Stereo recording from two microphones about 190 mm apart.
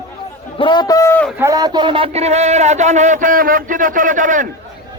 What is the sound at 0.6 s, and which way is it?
Speech, 25° left (ahead or behind).